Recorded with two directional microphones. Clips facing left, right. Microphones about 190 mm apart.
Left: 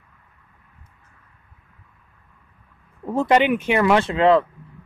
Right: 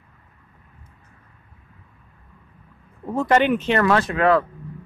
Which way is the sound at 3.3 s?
15° left (ahead or behind).